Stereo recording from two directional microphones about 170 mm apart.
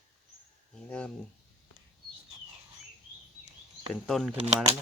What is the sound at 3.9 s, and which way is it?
Speech, 5° left (ahead or behind).